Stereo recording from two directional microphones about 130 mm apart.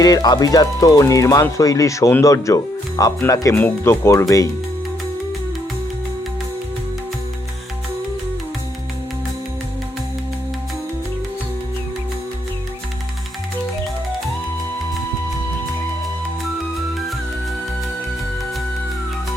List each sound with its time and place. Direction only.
0.0 s speech: 30° left (ahead or behind)